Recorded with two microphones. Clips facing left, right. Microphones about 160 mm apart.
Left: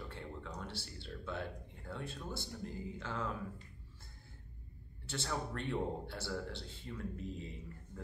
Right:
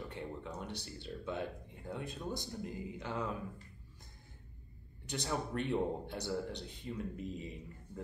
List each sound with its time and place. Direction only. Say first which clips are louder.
0.1 s speech: right 3 dB; 20° right (ahead or behind)
5.0 s a man's voice: right 2 dB; 15° right (ahead or behind)